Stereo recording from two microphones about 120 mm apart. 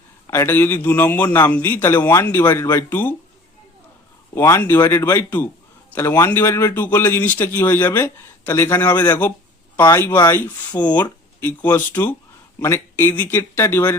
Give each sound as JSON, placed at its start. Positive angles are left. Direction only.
{"t": 0.3, "sound": "a man's voice", "side_deg": 20}
{"t": 4.4, "sound": "speech", "side_deg": 20}
{"t": 8.9, "sound": "speech", "side_deg": 35}
{"t": 9.7, "sound": "speech", "side_deg": 20}